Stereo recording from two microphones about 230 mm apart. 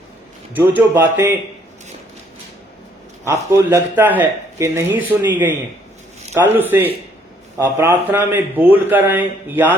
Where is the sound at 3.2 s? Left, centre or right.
Centre.